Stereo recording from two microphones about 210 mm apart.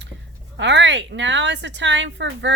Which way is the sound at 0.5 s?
60° right (ahead or behind).